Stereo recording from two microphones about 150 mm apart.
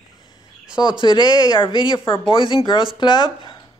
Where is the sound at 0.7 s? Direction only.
30° left (ahead or behind).